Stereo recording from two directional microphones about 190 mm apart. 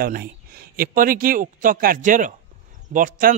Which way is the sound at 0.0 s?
50° right (ahead or behind).